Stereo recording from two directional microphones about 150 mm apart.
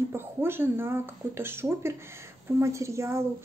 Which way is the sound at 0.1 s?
15° right (ahead or behind).